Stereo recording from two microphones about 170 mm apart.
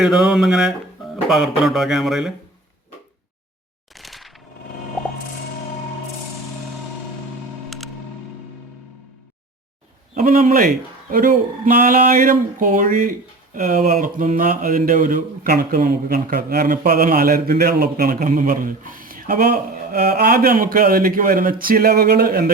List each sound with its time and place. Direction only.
0.0 s speech: 5° right (ahead or behind)
3.9 s a sound: centre (ahead or behind)
10.2 s a man's voice: 50° right (ahead or behind)